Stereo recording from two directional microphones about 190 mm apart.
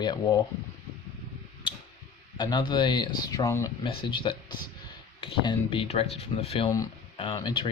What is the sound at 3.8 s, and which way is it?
Speech, 25° left (ahead or behind).